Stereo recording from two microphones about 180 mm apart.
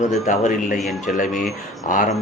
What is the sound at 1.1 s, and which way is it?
A man's voice, 45° left (ahead or behind).